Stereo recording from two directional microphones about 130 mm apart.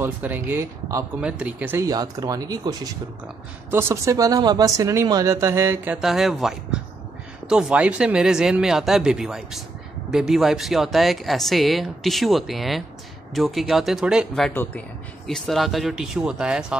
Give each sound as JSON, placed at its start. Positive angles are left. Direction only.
{"t": 0.0, "sound": "speech", "side_deg": -15}
{"t": 1.9, "sound": "speech", "side_deg": -30}
{"t": 5.9, "sound": "speech", "side_deg": 0}
{"t": 14.5, "sound": "speech", "side_deg": 15}
{"t": 15.2, "sound": "speech", "side_deg": 0}